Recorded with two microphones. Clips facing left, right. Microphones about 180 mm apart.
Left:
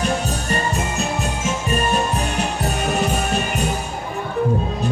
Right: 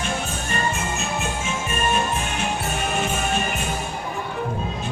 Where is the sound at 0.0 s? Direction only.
40° left (ahead or behind).